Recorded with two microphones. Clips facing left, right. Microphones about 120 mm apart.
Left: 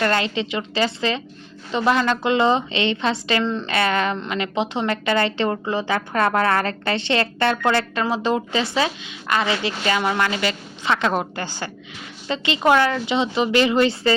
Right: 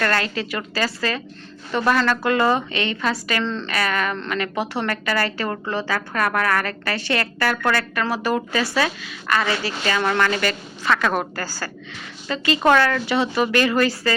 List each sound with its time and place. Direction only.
0.0 s a woman's voice: 20° left (ahead or behind)